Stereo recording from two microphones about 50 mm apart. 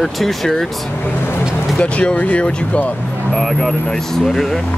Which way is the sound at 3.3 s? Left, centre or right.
Centre.